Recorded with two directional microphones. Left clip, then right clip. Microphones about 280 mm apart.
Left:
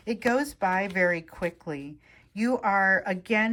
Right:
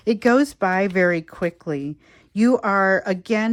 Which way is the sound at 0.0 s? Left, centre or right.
Centre.